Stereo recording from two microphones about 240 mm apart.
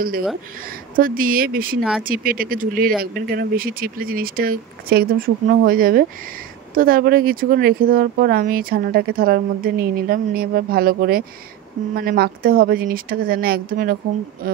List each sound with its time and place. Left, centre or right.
0.9 s speech: right